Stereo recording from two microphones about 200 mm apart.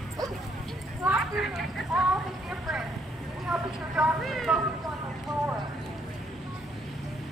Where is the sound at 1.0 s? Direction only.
5° right (ahead or behind).